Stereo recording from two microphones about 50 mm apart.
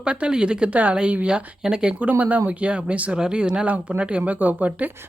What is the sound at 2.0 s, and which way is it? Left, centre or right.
Speech, right.